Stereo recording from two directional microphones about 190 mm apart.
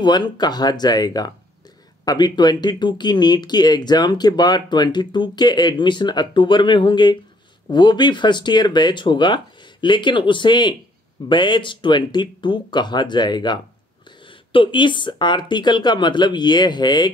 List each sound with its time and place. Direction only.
0.0 s speech: 20° left (ahead or behind)